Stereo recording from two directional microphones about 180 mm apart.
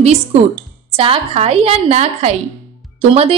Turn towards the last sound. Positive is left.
turn(degrees=-35)  # may be behind; listen again after turning